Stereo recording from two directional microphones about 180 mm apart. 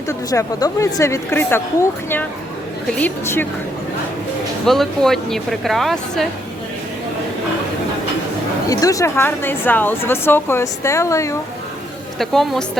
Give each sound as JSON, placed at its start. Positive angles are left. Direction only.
{"t": 0.1, "sound": "a woman's voice", "side_deg": 20}
{"t": 4.6, "sound": "speech", "side_deg": 0}
{"t": 8.7, "sound": "a woman's voice", "side_deg": 20}
{"t": 12.2, "sound": "speech", "side_deg": 0}